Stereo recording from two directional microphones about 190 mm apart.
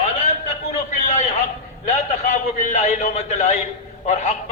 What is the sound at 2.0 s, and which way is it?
A man's voice, 40° left (ahead or behind).